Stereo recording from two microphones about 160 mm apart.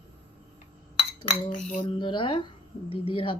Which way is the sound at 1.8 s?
30° left (ahead or behind).